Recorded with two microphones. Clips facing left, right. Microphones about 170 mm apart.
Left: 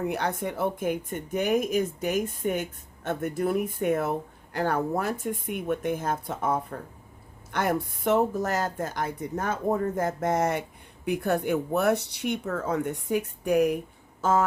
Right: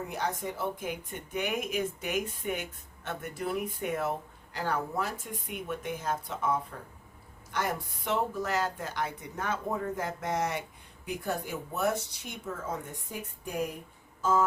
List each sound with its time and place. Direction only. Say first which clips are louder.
0.1 s speech: left 5 dB; 65° left (ahead or behind)
11.0 s speech: left 8 dB; 60° left (ahead or behind)
14.2 s music: left 3 dB; 70° left (ahead or behind)